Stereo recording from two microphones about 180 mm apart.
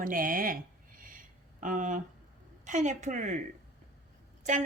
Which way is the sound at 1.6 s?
45° right (ahead or behind).